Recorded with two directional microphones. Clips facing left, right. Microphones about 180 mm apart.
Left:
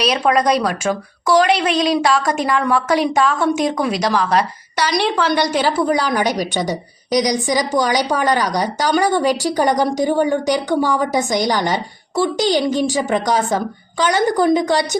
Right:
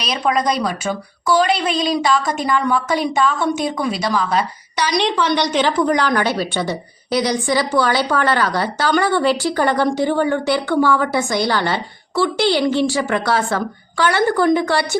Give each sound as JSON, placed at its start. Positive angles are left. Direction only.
{"t": 0.1, "sound": "a woman's voice", "side_deg": 5}
{"t": 5.2, "sound": "a woman's voice", "side_deg": 10}